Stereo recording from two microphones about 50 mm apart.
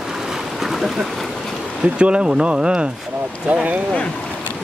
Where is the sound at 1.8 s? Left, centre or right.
Right.